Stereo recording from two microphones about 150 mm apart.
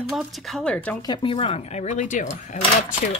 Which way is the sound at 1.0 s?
35° left (ahead or behind).